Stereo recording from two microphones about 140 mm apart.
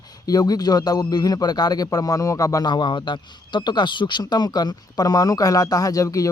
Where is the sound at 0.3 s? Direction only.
25° left (ahead or behind).